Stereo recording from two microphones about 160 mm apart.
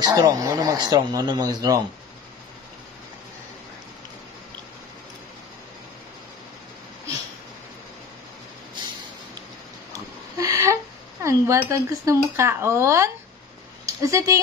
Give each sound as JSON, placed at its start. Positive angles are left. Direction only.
{"t": 0.0, "sound": "speech", "side_deg": -20}
{"t": 9.9, "sound": "a sound", "side_deg": -20}
{"t": 11.2, "sound": "speech", "side_deg": -20}